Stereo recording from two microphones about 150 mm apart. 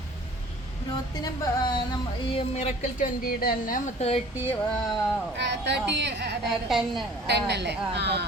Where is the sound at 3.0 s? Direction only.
70° left (ahead or behind).